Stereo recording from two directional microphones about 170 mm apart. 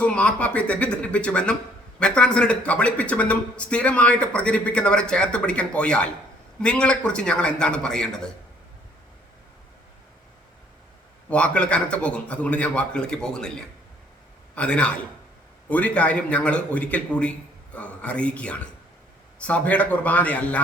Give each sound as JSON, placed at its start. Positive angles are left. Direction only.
{"t": 0.0, "sound": "a man's voice", "side_deg": 5}
{"t": 11.3, "sound": "speech", "side_deg": 5}